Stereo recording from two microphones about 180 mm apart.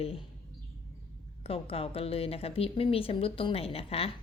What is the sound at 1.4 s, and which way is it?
A woman's voice, 30° left (ahead or behind).